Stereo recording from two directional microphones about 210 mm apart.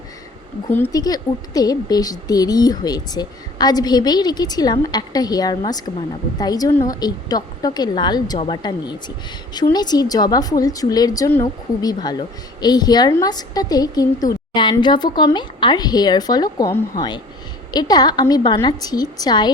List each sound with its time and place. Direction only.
0.7 s a woman's voice: 15° left (ahead or behind)